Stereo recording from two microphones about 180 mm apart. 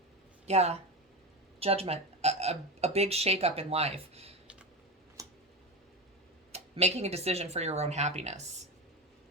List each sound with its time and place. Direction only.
0.4 s speech: 35° right (ahead or behind)
5.2 s tick: 20° right (ahead or behind)
6.5 s speech: 35° right (ahead or behind)